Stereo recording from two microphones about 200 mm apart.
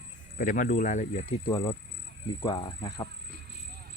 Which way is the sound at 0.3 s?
40° left (ahead or behind).